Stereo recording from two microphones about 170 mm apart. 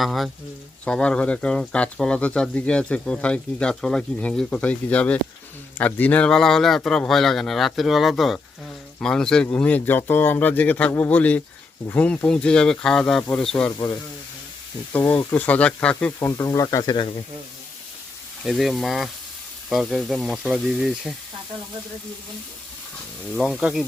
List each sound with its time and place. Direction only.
0.0 s speech: centre (ahead or behind)
13.7 s speech: 20° left (ahead or behind)
14.9 s speech: 10° left (ahead or behind)
16.5 s speech: 20° left (ahead or behind)
18.4 s speech: centre (ahead or behind)
23.3 s speech: centre (ahead or behind)